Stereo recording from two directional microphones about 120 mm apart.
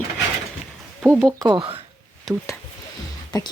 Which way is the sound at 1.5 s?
50° right (ahead or behind).